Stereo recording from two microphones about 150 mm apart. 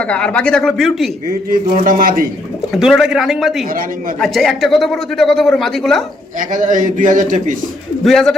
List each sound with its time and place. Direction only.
0.0 s speech: 10° left (ahead or behind)
1.5 s a man's voice: 65° right (ahead or behind)
2.7 s speech: 5° right (ahead or behind)
6.5 s a man's voice: 60° right (ahead or behind)
8.0 s speech: 5° left (ahead or behind)